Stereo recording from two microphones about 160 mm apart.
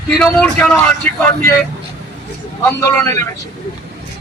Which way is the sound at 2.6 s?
15° left (ahead or behind).